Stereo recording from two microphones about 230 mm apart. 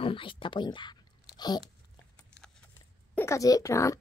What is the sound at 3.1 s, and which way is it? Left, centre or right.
Speech, centre.